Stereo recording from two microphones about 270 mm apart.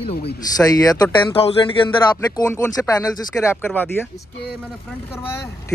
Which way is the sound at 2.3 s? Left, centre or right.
Centre.